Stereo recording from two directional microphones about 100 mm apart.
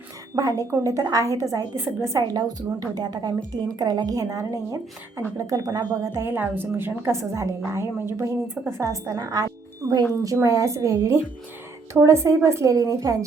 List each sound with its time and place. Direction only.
0.3 s a woman's voice: 35° right (ahead or behind)